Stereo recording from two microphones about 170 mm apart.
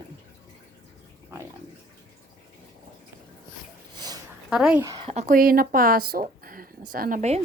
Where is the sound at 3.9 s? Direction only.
25° right (ahead or behind).